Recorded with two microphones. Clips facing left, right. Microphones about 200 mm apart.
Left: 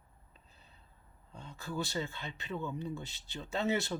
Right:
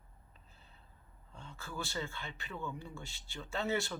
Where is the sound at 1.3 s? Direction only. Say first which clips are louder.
Left 5 dB; 20° left (ahead or behind).